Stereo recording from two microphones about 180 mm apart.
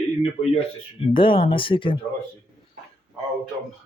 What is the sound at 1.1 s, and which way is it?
Speech, 30° left (ahead or behind).